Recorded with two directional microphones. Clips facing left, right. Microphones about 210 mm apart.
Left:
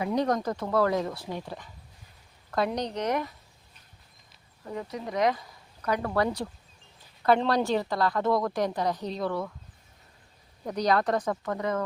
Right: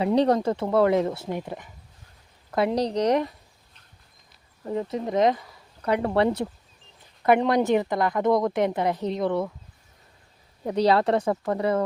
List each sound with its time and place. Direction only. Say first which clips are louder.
0.0 s a woman's voice: right 6 dB; 30° right (ahead or behind)
4.6 s a woman's voice: right 7 dB; 25° right (ahead or behind)
10.7 s a woman's voice: right 5 dB; 30° right (ahead or behind)